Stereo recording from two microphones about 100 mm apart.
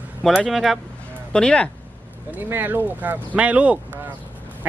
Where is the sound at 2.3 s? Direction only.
20° right (ahead or behind).